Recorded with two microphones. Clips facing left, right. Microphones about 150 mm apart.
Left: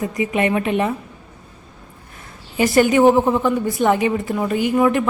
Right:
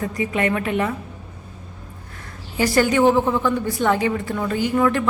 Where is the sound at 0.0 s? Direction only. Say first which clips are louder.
Left 2 dB; 20° left (ahead or behind).